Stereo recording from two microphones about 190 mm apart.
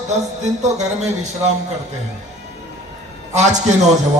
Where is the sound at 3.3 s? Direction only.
40° right (ahead or behind).